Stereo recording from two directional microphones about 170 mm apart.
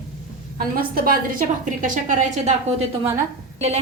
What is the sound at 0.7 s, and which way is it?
A woman's voice, 60° right (ahead or behind).